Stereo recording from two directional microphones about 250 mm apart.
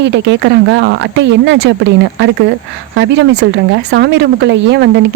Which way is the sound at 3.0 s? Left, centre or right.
Right.